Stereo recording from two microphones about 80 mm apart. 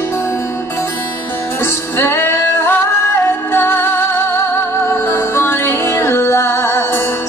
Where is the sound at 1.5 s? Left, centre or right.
Left.